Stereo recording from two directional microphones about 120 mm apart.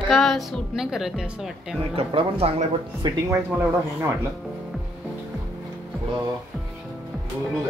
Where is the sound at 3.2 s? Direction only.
20° right (ahead or behind).